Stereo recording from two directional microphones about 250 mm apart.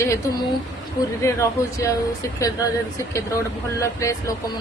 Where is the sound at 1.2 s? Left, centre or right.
Centre.